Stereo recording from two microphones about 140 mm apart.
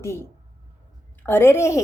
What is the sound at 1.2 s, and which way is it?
Speech, 15° left (ahead or behind).